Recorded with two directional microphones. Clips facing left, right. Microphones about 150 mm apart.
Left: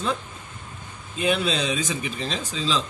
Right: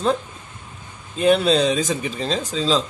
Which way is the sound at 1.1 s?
40° right (ahead or behind).